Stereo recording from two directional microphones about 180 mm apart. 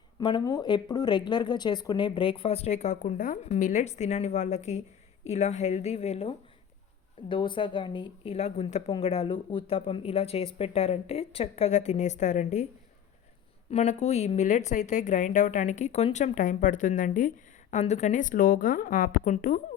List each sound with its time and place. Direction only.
0.2 s a woman's voice: 25° left (ahead or behind); by 12.6 s 40° left (ahead or behind)
13.7 s speech: 40° left (ahead or behind)